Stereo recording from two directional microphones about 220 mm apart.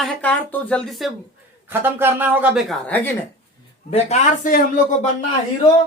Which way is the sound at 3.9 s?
30° left (ahead or behind).